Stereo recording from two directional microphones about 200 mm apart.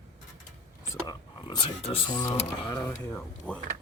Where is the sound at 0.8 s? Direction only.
20° left (ahead or behind).